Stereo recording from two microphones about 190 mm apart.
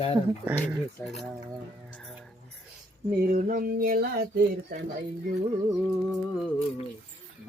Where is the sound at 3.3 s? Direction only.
50° right (ahead or behind).